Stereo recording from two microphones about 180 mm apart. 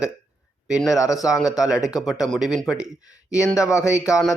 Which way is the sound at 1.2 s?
Centre (ahead or behind).